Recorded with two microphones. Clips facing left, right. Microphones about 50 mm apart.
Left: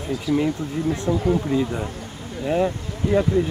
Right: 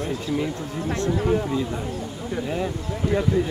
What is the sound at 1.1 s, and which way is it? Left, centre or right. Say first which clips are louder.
Speech: left 1 dB; right.